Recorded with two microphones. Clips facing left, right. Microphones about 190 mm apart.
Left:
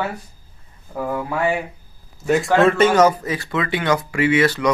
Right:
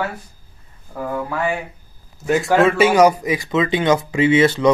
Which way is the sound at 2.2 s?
Centre (ahead or behind).